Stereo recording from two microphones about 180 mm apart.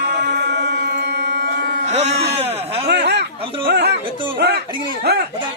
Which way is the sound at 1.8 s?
35° right (ahead or behind).